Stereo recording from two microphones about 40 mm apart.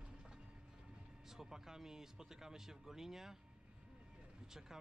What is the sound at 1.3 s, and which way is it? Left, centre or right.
Speech, centre.